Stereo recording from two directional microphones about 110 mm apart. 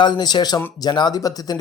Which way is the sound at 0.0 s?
40° left (ahead or behind).